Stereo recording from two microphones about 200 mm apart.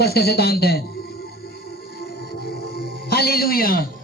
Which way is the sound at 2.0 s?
50° left (ahead or behind).